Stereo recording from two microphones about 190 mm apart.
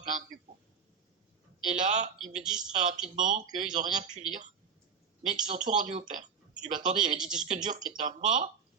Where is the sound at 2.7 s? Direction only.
45° right (ahead or behind).